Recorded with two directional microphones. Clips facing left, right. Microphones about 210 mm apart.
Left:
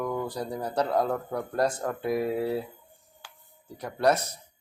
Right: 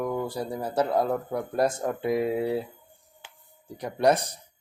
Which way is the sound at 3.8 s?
15° right (ahead or behind).